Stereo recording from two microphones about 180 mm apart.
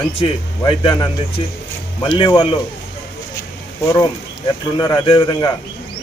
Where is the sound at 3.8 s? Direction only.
20° left (ahead or behind).